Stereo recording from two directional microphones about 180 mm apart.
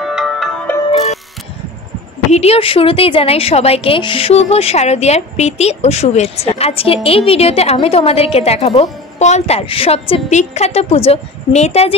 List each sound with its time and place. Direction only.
0.0 s music: centre (ahead or behind)
0.8 s music: 35° left (ahead or behind)
2.3 s a woman's voice: 35° left (ahead or behind)